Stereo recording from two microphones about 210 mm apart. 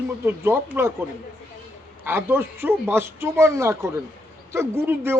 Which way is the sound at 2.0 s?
10° right (ahead or behind).